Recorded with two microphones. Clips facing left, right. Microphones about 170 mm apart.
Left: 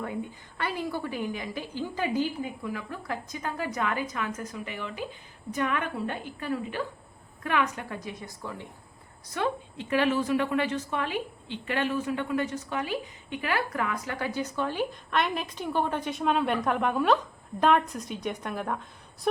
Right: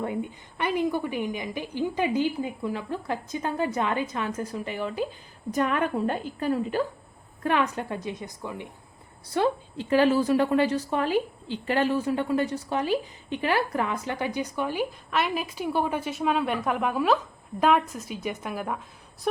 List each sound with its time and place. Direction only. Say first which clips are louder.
0.0 s a woman's voice: right 4 dB; 20° right (ahead or behind)
9.2 s a woman's voice: right 5 dB; 30° right (ahead or behind); by 19.3 s 5° right (ahead or behind)